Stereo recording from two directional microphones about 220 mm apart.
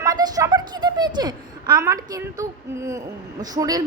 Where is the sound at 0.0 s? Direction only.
15° right (ahead or behind).